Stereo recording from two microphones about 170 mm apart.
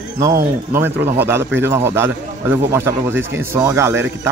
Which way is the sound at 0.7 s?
15° right (ahead or behind).